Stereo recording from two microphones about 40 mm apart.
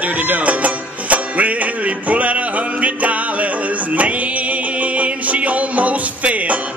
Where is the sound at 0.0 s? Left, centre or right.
Right.